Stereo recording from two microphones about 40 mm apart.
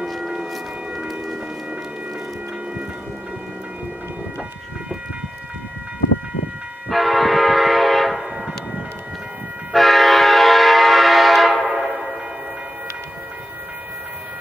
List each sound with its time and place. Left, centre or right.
0.2 s a sound: centre
6.9 s train: centre
8.2 s train: centre
9.7 s train: centre